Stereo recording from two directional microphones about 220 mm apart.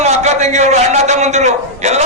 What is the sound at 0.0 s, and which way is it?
A man's voice, 30° right (ahead or behind).